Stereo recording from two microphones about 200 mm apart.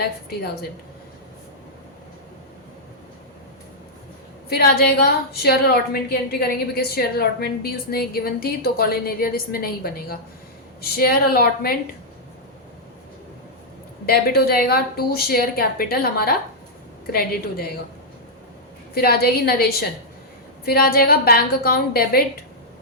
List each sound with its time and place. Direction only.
0.0 s a woman's voice: 50° left (ahead or behind)
4.4 s a woman's voice: 50° left (ahead or behind)
14.1 s a woman's voice: 50° left (ahead or behind)
18.9 s a woman's voice: 50° left (ahead or behind)